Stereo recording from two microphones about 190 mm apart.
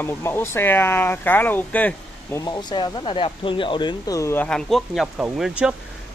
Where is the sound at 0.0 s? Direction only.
10° left (ahead or behind).